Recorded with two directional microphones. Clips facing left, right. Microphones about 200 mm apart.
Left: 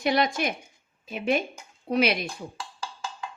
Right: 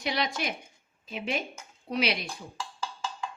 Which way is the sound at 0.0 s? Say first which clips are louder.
Left 6 dB; 50° left (ahead or behind).